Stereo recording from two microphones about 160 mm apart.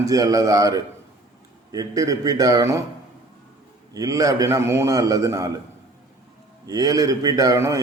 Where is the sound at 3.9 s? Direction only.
20° right (ahead or behind).